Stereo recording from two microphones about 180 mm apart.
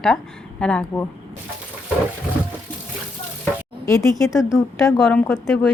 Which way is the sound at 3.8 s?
15° left (ahead or behind).